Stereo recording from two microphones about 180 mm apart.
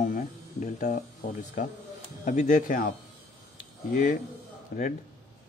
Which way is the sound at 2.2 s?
45° left (ahead or behind).